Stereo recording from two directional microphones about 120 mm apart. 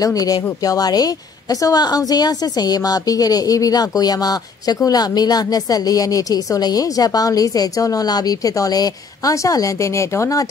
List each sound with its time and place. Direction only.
0.0 s a woman's voice: 30° left (ahead or behind)